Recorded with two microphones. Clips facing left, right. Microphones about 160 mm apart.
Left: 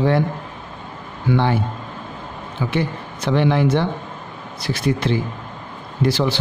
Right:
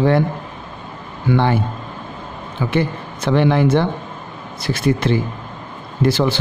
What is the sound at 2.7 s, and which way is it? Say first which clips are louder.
A man's voice: right 4 dB; 55° right (ahead or behind).